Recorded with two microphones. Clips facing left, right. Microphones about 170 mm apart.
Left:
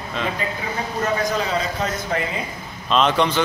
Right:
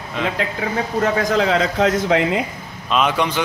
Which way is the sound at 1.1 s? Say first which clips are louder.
Right 4 dB; 90° right.